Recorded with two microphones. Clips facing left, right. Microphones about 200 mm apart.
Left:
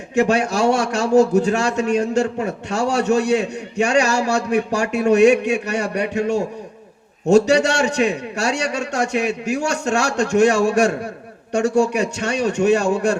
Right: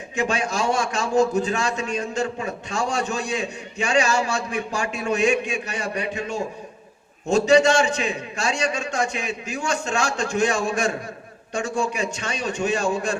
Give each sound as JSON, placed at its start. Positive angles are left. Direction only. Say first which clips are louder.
{"t": 0.1, "sound": "a man's voice", "louder": "left 8 dB", "side_deg": 65}